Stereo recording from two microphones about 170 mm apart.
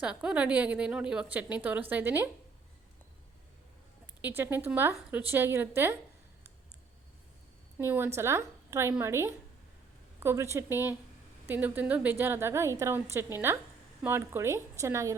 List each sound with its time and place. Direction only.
0.0 s a woman's voice: 5° right (ahead or behind)
4.0 s a woman's voice: 10° right (ahead or behind)
7.8 s a woman's voice: 10° right (ahead or behind)